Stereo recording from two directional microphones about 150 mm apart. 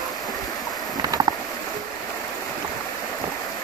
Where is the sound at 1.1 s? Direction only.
30° right (ahead or behind).